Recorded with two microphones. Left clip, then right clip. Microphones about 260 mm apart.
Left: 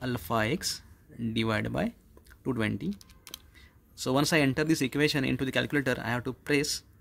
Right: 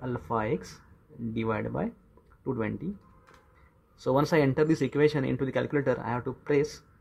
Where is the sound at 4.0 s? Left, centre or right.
Left.